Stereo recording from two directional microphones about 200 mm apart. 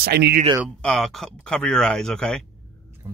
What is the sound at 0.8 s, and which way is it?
Speech, 5° left (ahead or behind).